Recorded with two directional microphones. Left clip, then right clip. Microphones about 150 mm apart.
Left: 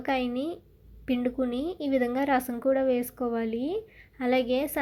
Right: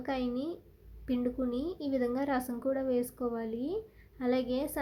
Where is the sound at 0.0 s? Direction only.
25° left (ahead or behind).